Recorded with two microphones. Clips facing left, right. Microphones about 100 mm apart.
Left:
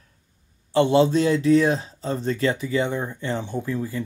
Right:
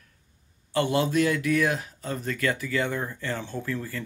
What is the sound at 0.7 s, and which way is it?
Speech, 25° left (ahead or behind).